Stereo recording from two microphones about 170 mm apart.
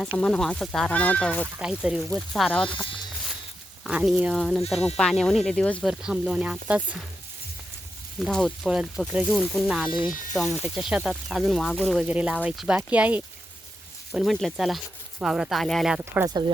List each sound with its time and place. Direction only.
0.2 s speech: 5° left (ahead or behind)
1.5 s speech: 5° right (ahead or behind)
2.6 s speech: 30° left (ahead or behind)
3.8 s speech: centre (ahead or behind)
8.2 s speech: centre (ahead or behind)